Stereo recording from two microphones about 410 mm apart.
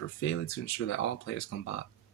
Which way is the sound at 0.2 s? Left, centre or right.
Left.